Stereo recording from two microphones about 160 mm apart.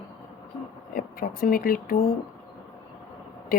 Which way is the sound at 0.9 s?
65° left (ahead or behind).